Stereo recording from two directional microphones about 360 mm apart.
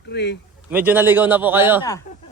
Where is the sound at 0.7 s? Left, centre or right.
Centre.